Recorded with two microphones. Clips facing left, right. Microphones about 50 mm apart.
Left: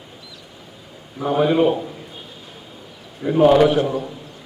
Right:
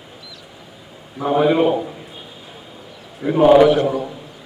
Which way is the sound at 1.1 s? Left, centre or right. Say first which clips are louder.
Right 2 dB; centre.